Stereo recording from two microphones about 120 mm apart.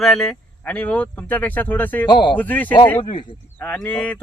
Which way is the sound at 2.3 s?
15° left (ahead or behind).